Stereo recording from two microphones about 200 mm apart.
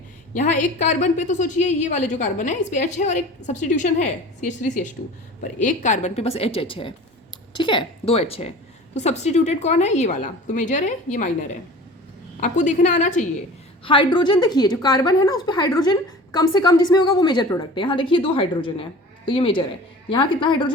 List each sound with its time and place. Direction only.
0.3 s a woman's voice: 40° left (ahead or behind)
13.8 s a woman's voice: 25° left (ahead or behind)